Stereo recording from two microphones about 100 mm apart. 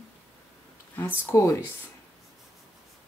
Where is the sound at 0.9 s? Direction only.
25° left (ahead or behind).